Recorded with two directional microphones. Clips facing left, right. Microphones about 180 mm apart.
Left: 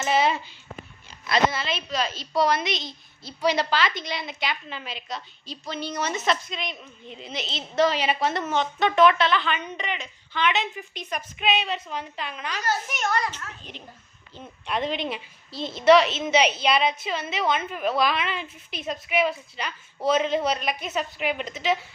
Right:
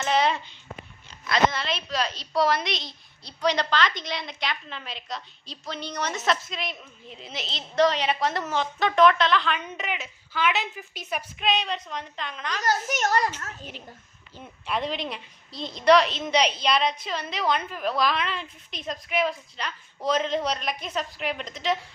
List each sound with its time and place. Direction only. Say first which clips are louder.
0.0 s a sound: left 1 dB; 5° left (ahead or behind)
1.5 s a woman's voice: left 1 dB; centre (ahead or behind)
11.4 s a woman's voice: left 1 dB; 5° left (ahead or behind)
12.6 s a child's voice: right 2 dB; 40° right (ahead or behind)
14.3 s a woman's voice: left 1 dB; centre (ahead or behind)